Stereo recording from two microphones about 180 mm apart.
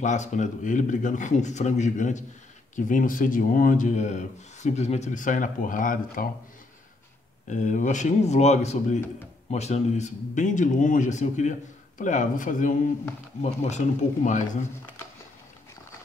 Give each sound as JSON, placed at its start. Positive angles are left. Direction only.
{"t": 0.0, "sound": "speech", "side_deg": 40}
{"t": 7.4, "sound": "speech", "side_deg": 45}